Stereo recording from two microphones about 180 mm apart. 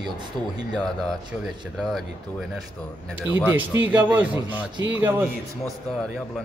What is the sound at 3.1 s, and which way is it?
Speech, 10° right (ahead or behind).